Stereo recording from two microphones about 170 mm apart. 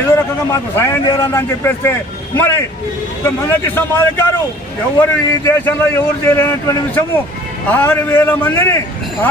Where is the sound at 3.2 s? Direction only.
15° left (ahead or behind).